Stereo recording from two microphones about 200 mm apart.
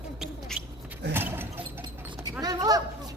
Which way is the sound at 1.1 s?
10° right (ahead or behind).